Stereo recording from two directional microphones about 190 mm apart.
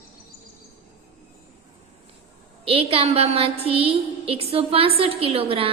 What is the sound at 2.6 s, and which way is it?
A woman's voice, 30° right (ahead or behind).